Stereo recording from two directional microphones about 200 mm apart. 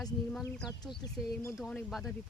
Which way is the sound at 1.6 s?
Centre (ahead or behind).